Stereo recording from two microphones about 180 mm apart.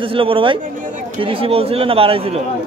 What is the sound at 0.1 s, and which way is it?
Speech, 30° right (ahead or behind).